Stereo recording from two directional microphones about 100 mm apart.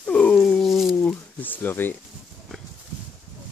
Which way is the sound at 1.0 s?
15° left (ahead or behind).